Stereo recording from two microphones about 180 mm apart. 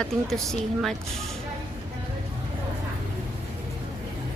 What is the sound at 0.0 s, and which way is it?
Speech, 5° left (ahead or behind).